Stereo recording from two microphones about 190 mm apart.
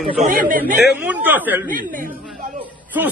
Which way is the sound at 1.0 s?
10° right (ahead or behind).